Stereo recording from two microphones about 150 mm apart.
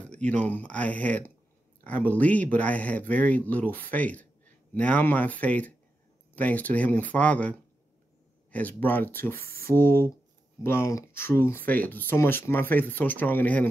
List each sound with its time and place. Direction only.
0.0 s speech: 10° left (ahead or behind)
9.3 s speech: 80° right
9.7 s speech: 15° left (ahead or behind)